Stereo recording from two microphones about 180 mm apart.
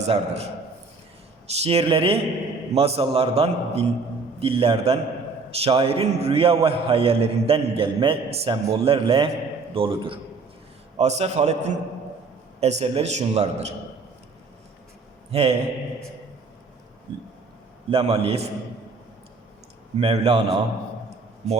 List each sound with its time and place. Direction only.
0.0 s a man's voice: 35° right (ahead or behind)
1.5 s a man's voice: 35° right (ahead or behind)
15.3 s a man's voice: 35° right (ahead or behind)
17.9 s a man's voice: 30° right (ahead or behind)
20.0 s a man's voice: 30° right (ahead or behind)